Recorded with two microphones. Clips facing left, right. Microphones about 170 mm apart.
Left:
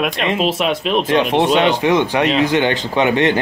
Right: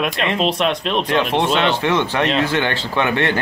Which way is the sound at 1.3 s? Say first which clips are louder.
Left 4 dB; 15° left (ahead or behind).